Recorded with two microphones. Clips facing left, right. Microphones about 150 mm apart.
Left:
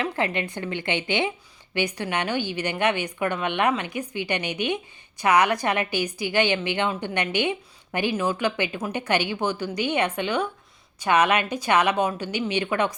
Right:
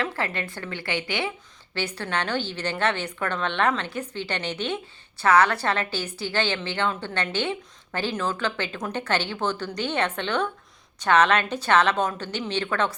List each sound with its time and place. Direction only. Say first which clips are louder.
0.0 s a woman's voice: left 3 dB; 15° left (ahead or behind)